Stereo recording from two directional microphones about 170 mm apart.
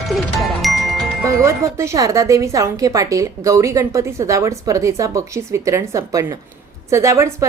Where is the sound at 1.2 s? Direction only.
15° right (ahead or behind).